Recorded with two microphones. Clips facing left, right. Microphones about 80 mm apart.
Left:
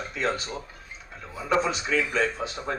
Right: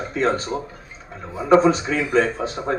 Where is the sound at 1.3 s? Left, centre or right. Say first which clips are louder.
Right 11 dB; right.